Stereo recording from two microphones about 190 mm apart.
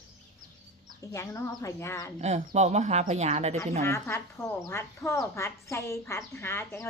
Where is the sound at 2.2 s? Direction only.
35° right (ahead or behind).